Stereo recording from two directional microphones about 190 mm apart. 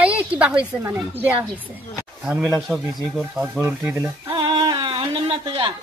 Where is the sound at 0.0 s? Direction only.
5° right (ahead or behind).